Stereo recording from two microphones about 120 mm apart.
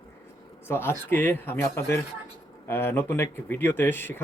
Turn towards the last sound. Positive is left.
turn(degrees=15)  # may be behind; listen again after turning